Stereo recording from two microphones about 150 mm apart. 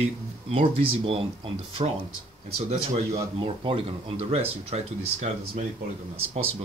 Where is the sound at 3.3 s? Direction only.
35° right (ahead or behind).